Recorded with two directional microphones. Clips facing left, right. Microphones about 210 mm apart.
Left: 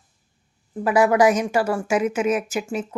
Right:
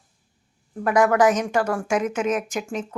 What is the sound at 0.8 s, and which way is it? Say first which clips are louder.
Speech: left 1 dB; 5° left (ahead or behind).